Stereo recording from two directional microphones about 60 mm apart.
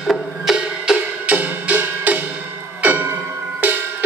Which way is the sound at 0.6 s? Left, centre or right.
Centre.